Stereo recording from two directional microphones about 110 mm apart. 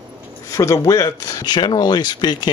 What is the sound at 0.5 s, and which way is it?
Speech, 30° left (ahead or behind).